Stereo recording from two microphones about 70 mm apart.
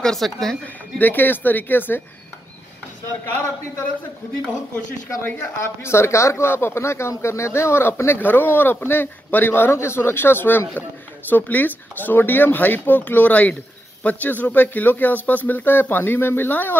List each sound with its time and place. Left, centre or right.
0.0 s speech: centre
0.9 s speech: left
5.2 s speech: left